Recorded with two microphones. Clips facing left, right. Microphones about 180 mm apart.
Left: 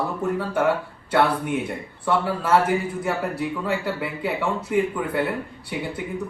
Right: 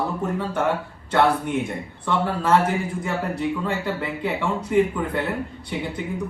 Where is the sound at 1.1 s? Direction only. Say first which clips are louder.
Right 1 dB; 10° left (ahead or behind).